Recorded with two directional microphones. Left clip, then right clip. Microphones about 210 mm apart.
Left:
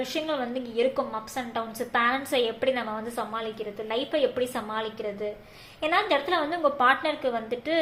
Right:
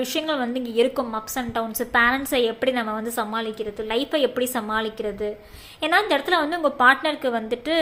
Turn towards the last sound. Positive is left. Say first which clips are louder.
# right 4 dB
turn(degrees=-30)  # may be behind; listen again after turning